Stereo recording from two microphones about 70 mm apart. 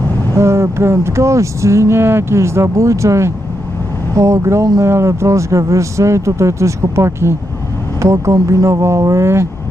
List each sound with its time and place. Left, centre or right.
0.3 s speech: right